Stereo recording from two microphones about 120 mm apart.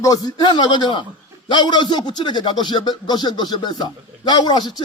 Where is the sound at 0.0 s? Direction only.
30° left (ahead or behind).